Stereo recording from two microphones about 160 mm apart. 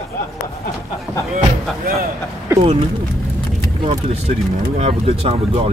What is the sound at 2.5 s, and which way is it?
Speech, 20° right (ahead or behind).